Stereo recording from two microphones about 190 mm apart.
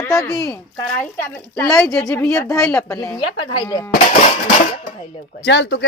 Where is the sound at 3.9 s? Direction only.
40° left (ahead or behind).